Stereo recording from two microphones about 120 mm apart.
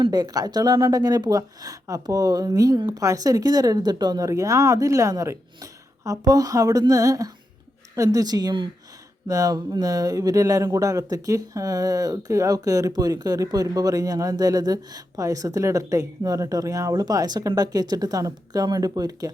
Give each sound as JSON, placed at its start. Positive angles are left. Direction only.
{"t": 0.0, "sound": "speech", "side_deg": -35}